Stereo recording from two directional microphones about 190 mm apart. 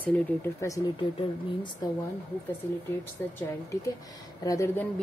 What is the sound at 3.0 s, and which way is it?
A woman's voice, 15° left (ahead or behind).